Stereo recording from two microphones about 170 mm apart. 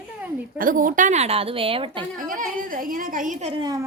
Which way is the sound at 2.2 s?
50° right (ahead or behind).